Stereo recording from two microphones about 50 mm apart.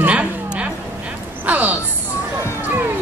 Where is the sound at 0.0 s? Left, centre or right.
Right.